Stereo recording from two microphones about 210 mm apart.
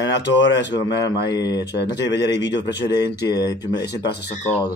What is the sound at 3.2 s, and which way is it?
Speech, 20° left (ahead or behind).